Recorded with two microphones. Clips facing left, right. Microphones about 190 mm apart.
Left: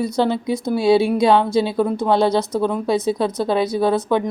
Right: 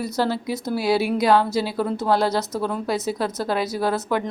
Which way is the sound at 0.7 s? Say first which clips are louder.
Left 6 dB; 25° left (ahead or behind).